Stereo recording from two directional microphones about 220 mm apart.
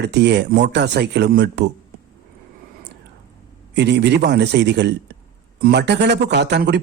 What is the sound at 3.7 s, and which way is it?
Speech, 50° right (ahead or behind).